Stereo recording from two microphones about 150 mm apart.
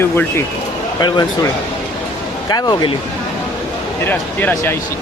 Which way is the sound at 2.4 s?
25° left (ahead or behind).